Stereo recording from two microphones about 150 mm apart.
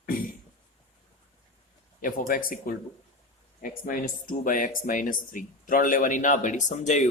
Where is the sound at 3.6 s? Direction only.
65° left (ahead or behind).